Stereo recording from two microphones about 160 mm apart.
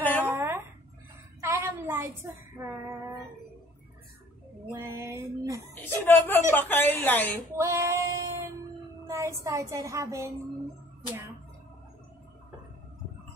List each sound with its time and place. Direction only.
0.0 s a sound: 10° left (ahead or behind)
0.3 s a sound: 15° right (ahead or behind)
4.6 s speech: 15° right (ahead or behind)
6.0 s a woman's voice: 15° left (ahead or behind)
7.5 s child singing: 15° right (ahead or behind)
9.0 s a woman's voice: 20° right (ahead or behind)